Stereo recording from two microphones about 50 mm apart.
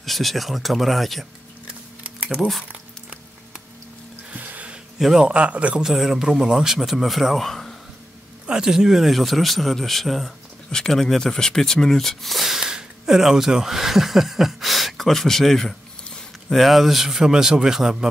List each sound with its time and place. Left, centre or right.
0.0 s a man's voice: centre
4.3 s music: right
4.9 s a man's voice: centre
5.2 s a man's voice: right
5.8 s a man's voice: centre
8.5 s a man's voice: centre